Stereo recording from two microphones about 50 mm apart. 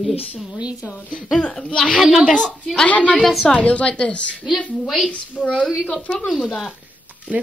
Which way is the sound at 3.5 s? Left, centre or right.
Left.